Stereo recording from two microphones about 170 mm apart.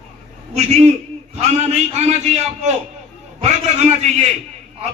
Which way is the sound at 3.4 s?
40° right (ahead or behind).